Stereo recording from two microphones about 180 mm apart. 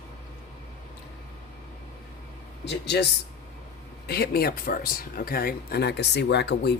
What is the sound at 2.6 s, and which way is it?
Speech, 65° left (ahead or behind).